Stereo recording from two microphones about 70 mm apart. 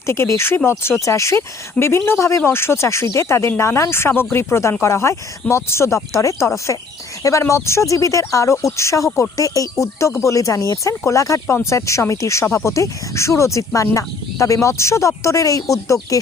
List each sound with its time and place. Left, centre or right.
0.0 s speech: left
11.4 s speech: left